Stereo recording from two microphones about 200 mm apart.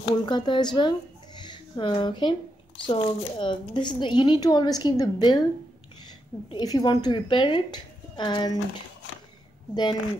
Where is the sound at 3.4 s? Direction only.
25° left (ahead or behind).